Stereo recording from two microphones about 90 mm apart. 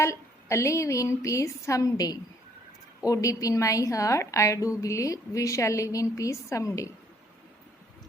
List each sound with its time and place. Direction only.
0.0 s a woman's voice: 30° left (ahead or behind)